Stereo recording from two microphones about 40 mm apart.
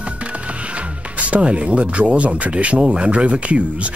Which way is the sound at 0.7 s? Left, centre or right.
Right.